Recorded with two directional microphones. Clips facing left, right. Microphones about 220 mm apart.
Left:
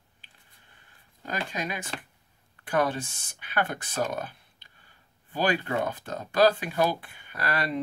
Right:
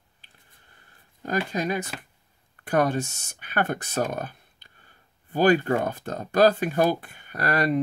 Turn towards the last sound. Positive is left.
turn(degrees=-45)  # may be behind; listen again after turning